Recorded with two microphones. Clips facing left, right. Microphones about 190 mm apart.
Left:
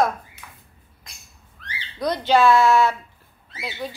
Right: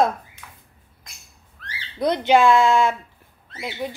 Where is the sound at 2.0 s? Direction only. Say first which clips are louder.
Right 2 dB; 20° right (ahead or behind).